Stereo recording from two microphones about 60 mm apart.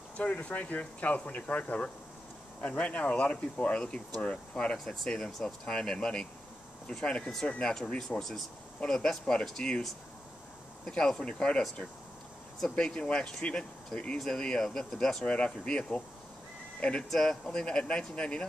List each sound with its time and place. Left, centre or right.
0.2 s speech: left
4.7 s speech: centre
8.2 s speech: centre
10.9 s speech: centre
12.7 s speech: centre
15.2 s speech: centre
17.1 s speech: centre